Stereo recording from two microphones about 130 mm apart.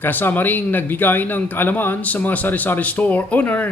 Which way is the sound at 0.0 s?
15° left (ahead or behind).